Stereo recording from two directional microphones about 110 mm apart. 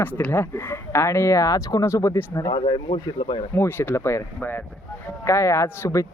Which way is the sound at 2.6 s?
55° left (ahead or behind).